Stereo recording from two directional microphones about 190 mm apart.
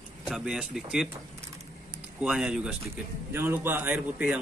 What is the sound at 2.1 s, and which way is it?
A man's voice, 5° right (ahead or behind).